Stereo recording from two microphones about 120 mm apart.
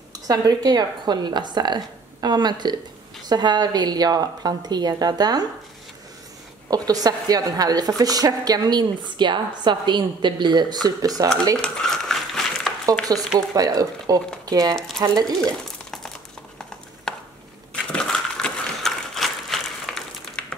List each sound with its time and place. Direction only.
0.3 s a woman's voice: 35° right (ahead or behind)
6.7 s a woman's voice: 30° right (ahead or behind)
11.5 s a sound: 5° left (ahead or behind)
13.6 s a woman's voice: 30° right (ahead or behind)
15.4 s a sound: 5° left (ahead or behind)
17.1 s chop: 5° left (ahead or behind)
17.9 s ratchet: 5° left (ahead or behind)